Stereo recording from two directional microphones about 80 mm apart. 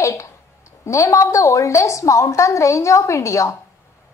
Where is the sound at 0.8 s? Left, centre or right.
Left.